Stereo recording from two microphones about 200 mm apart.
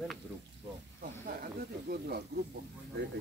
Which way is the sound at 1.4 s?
50° right (ahead or behind).